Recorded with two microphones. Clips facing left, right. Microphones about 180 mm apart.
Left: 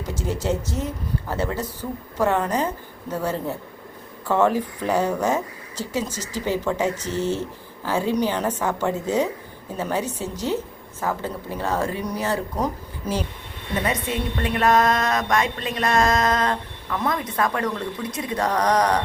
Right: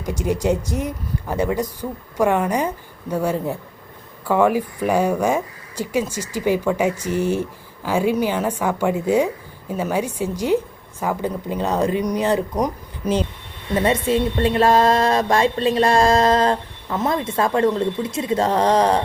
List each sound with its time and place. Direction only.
0.0 s speech: 15° right (ahead or behind)
13.8 s a woman's voice: 30° right (ahead or behind)